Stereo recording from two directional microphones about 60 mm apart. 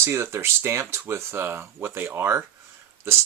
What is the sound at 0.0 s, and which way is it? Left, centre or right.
Speech, right.